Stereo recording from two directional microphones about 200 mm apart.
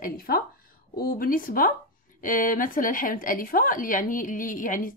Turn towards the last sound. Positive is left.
turn(degrees=40)  # may be behind; listen again after turning